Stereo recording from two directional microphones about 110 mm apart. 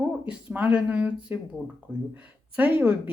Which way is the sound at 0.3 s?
10° right (ahead or behind).